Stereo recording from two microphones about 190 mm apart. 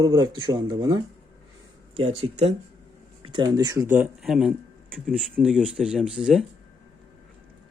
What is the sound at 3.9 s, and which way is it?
A man's voice, 5° right (ahead or behind).